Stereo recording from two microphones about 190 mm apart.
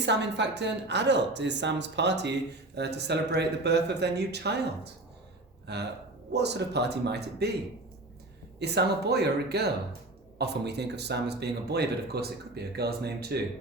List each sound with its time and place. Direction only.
0.0 s speech: 65° right (ahead or behind)
8.5 s speech: 60° right (ahead or behind)